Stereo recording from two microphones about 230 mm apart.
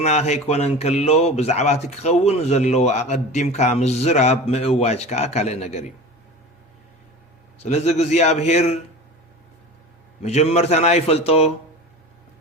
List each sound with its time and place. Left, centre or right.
0.0 s speech: left
7.6 s speech: left
10.2 s speech: left